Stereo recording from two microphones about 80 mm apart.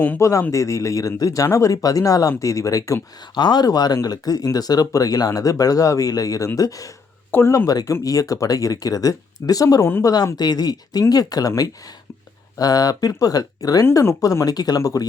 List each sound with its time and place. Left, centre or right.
0.2 s speech: left
3.3 s speech: left
7.3 s speech: left
7.7 s speech: left